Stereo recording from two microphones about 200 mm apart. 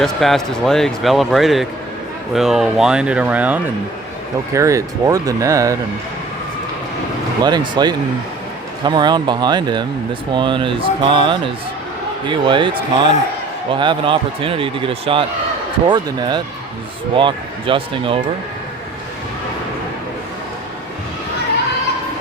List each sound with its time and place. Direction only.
0.0 s speech: centre (ahead or behind); by 5.7 s 15° right (ahead or behind)
7.4 s speech: 20° right (ahead or behind)